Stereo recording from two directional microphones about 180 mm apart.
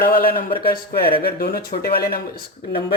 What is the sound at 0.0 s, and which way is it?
Speech, 55° left (ahead or behind).